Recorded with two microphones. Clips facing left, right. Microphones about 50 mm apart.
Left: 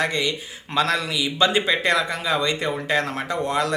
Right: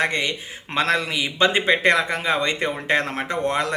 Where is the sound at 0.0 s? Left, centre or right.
Right.